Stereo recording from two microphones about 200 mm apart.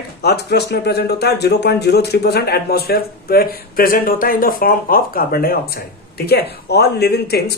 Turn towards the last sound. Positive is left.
turn(degrees=55)  # may be behind; listen again after turning